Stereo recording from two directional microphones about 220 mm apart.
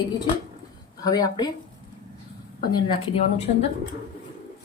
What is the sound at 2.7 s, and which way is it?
Speech, 20° left (ahead or behind).